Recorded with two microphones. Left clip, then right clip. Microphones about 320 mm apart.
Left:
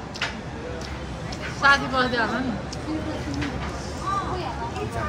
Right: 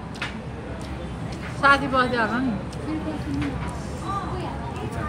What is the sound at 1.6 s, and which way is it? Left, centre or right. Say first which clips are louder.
Speech: right 1 dB; right.